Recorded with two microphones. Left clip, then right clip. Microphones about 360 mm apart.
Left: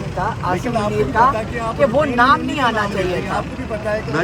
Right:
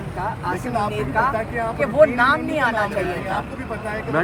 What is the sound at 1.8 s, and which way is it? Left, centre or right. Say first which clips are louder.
Speech: left 1 dB; centre.